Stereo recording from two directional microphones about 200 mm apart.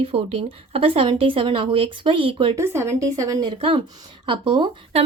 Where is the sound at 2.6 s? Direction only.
10° right (ahead or behind); by 5.1 s 30° right (ahead or behind).